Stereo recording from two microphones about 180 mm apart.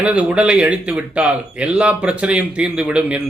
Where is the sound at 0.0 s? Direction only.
10° right (ahead or behind).